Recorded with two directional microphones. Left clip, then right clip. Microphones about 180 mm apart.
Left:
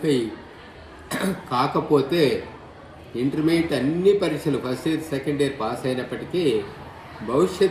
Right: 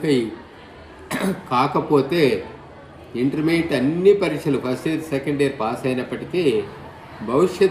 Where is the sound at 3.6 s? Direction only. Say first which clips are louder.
Right 3 dB; 35° right (ahead or behind).